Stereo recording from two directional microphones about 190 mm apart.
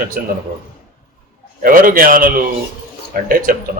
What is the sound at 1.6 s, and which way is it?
Speech, 50° right (ahead or behind).